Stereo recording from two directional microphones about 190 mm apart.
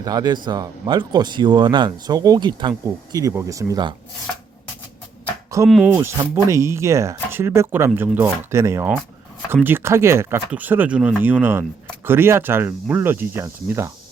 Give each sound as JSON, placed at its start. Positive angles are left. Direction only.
{"t": 0.0, "sound": "speech", "side_deg": -20}
{"t": 5.6, "sound": "speech", "side_deg": -5}